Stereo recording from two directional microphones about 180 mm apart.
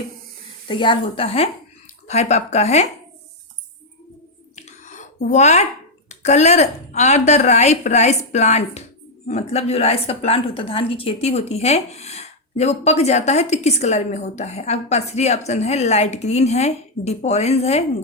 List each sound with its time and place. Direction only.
0.7 s a woman's voice: 25° left (ahead or behind)
4.5 s a sound: 40° left (ahead or behind)
6.1 s a woman's voice: 40° left (ahead or behind)